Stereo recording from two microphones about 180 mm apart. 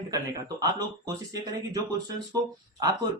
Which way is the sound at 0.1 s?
20° right (ahead or behind).